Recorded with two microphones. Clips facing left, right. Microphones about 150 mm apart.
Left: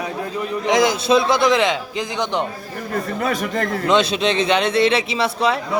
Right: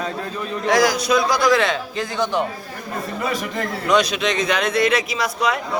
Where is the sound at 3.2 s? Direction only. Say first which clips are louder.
Left 1 dB; 50° left (ahead or behind).